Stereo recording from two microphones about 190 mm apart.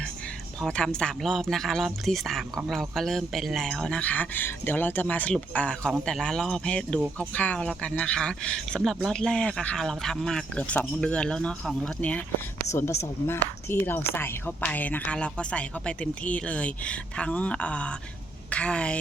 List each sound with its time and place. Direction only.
0.6 s speech: 5° left (ahead or behind)